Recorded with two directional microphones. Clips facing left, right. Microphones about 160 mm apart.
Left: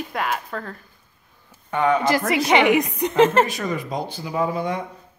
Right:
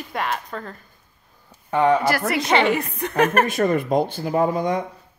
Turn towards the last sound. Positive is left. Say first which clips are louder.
# right 3 dB
turn(degrees=-45)  # may be behind; listen again after turning